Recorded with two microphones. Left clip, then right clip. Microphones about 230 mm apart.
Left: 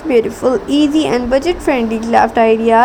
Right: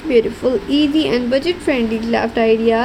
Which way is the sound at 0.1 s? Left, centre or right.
Centre.